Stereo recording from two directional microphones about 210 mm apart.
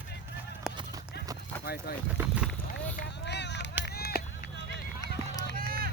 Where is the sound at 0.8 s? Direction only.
15° right (ahead or behind).